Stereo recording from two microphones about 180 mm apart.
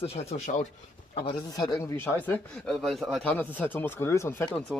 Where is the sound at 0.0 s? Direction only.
35° left (ahead or behind).